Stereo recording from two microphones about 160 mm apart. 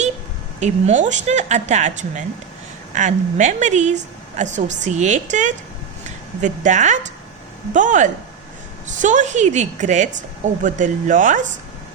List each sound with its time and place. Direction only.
0.6 s a woman's voice: 45° right (ahead or behind)